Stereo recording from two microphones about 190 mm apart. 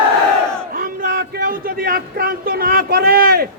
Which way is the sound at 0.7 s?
45° right (ahead or behind).